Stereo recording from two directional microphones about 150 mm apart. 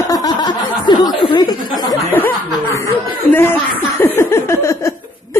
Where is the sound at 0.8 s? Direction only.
30° left (ahead or behind).